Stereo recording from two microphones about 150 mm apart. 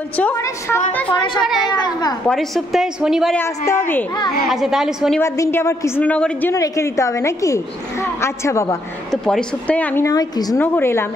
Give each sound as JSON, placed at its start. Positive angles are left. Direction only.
{"t": 0.2, "sound": "a woman's voice", "side_deg": 15}
{"t": 1.4, "sound": "a woman's voice", "side_deg": 0}
{"t": 1.7, "sound": "a woman's voice", "side_deg": 30}
{"t": 2.2, "sound": "a woman's voice", "side_deg": 0}
{"t": 3.3, "sound": "a woman's voice", "side_deg": 20}
{"t": 4.5, "sound": "a woman's voice", "side_deg": 0}
{"t": 5.2, "sound": "a woman's voice", "side_deg": 15}
{"t": 6.5, "sound": "a woman's voice", "side_deg": 20}
{"t": 9.1, "sound": "a woman's voice", "side_deg": 0}
{"t": 10.0, "sound": "a woman's voice", "side_deg": 25}